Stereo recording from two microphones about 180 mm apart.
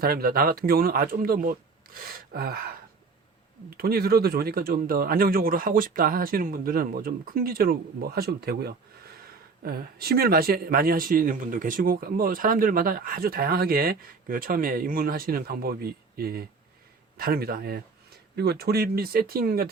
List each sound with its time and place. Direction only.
0.0 s speech: 55° right (ahead or behind)
3.8 s speech: 60° right (ahead or behind)